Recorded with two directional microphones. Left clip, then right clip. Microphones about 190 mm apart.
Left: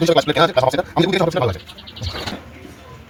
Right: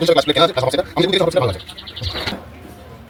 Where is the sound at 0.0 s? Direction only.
45° left (ahead or behind).